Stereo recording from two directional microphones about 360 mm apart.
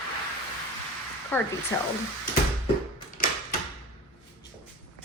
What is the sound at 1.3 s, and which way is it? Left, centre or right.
Speech, centre.